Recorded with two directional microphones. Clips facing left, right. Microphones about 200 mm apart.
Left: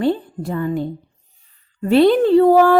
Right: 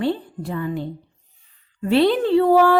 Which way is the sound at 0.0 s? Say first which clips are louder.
Left 4 dB; 45° left (ahead or behind).